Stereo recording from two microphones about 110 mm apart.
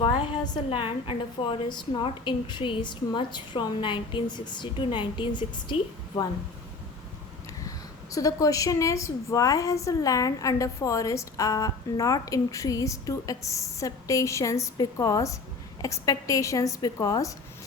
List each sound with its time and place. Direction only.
0.0 s a woman's voice: 50° left (ahead or behind)
8.1 s a woman's voice: 30° left (ahead or behind)